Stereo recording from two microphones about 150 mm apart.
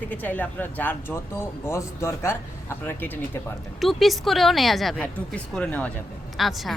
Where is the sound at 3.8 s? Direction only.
Centre (ahead or behind).